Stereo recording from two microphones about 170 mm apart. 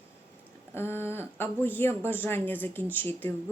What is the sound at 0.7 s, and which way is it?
Speech, 15° left (ahead or behind).